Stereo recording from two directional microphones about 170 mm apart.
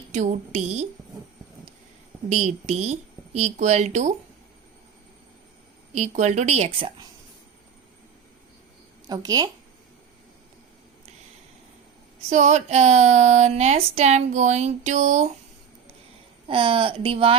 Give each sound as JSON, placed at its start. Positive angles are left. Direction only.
{"t": 0.1, "sound": "speech", "side_deg": -45}
{"t": 2.3, "sound": "speech", "side_deg": -40}
{"t": 5.9, "sound": "speech", "side_deg": -40}
{"t": 9.0, "sound": "a woman's voice", "side_deg": -25}
{"t": 12.3, "sound": "speech", "side_deg": -40}
{"t": 16.5, "sound": "speech", "side_deg": -30}